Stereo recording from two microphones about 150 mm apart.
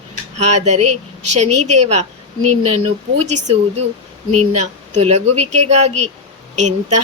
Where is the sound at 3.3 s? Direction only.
50° right (ahead or behind).